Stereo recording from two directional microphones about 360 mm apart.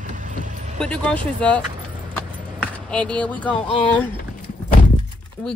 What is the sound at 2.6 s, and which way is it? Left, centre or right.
Speech, centre.